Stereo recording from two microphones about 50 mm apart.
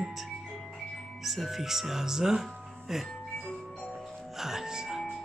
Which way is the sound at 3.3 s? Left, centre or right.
Centre.